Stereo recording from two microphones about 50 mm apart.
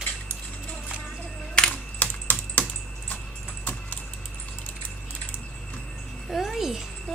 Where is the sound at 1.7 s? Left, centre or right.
Left.